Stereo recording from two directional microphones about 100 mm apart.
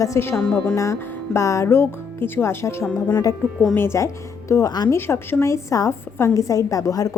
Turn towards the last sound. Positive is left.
turn(degrees=35)  # may be behind; listen again after turning